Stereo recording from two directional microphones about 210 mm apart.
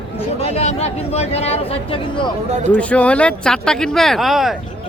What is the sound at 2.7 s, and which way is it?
Speech, 5° left (ahead or behind).